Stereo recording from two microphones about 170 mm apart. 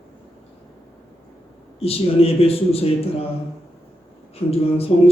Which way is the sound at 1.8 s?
35° left (ahead or behind).